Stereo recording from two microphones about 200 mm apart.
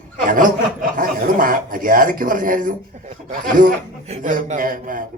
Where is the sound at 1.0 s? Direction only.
45° right (ahead or behind).